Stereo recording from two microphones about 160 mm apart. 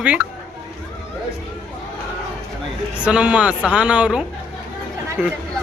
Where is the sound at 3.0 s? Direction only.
5° right (ahead or behind).